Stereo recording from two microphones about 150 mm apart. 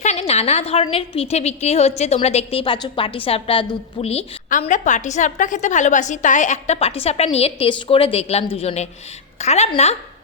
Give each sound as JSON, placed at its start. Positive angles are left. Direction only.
{"t": 0.0, "sound": "a woman's voice", "side_deg": 45}
{"t": 4.7, "sound": "a woman's voice", "side_deg": 55}